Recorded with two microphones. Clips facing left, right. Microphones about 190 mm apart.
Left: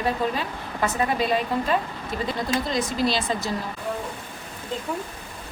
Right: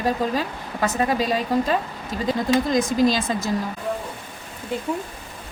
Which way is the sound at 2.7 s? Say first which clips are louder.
Right 5 dB; 45° right (ahead or behind).